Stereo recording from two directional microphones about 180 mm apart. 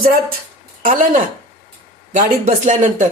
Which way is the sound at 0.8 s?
50° right (ahead or behind).